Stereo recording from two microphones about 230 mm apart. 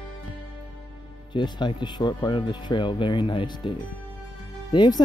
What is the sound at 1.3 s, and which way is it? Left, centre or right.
Speech, centre.